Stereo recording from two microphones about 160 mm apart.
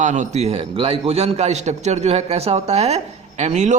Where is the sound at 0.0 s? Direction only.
50° right (ahead or behind).